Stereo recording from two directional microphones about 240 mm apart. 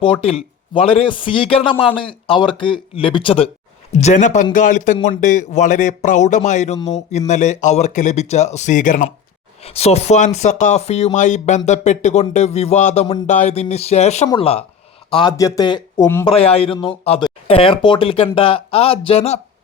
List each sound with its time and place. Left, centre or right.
0.0 s a man's voice: left
16.2 s speech: left